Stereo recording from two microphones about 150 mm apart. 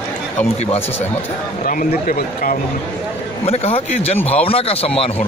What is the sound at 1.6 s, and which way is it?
Speech, 65° left (ahead or behind).